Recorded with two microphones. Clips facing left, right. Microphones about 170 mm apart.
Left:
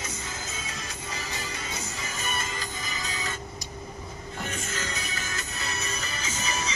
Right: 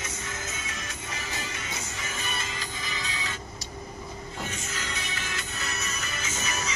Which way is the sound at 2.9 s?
45° left (ahead or behind).